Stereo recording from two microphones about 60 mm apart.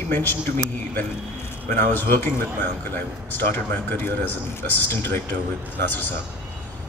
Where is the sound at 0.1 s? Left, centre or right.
Left.